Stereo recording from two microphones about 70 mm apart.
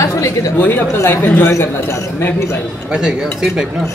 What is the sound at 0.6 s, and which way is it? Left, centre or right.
Speech, left.